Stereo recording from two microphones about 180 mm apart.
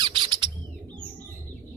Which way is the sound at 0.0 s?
25° right (ahead or behind).